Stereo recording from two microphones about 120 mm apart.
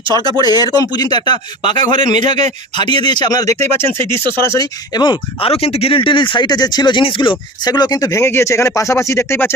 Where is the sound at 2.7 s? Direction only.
40° left (ahead or behind).